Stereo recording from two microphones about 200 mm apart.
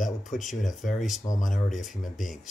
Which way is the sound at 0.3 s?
Centre (ahead or behind).